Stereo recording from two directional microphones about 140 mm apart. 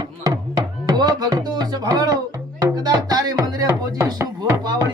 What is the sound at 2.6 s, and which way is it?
Music, 20° right (ahead or behind).